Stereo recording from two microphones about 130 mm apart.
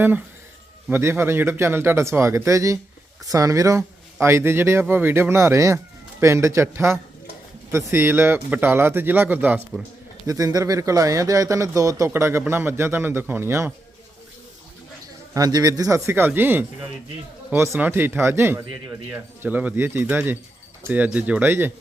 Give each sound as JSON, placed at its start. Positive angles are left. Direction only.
{"t": 0.9, "sound": "speech", "side_deg": -15}
{"t": 10.2, "sound": "speech", "side_deg": -25}
{"t": 15.3, "sound": "speech", "side_deg": -30}